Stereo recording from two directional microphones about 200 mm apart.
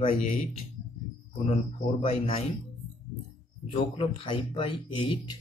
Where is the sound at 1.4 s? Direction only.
30° left (ahead or behind).